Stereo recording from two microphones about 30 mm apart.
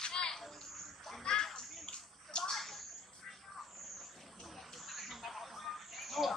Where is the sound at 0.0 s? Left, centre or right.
Left.